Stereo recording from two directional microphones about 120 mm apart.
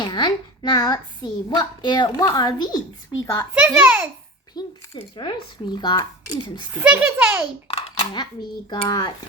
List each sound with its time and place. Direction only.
0.0 s a child's voice: 40° left (ahead or behind)
3.5 s speech: 10° right (ahead or behind)
4.6 s a child's voice: 35° left (ahead or behind)
6.7 s speech: 10° right (ahead or behind)
7.7 s a sound: 55° left (ahead or behind)
8.7 s a child's voice: 40° left (ahead or behind)